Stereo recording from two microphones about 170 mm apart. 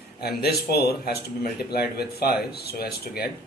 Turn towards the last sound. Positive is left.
turn(degrees=65)  # may be behind; listen again after turning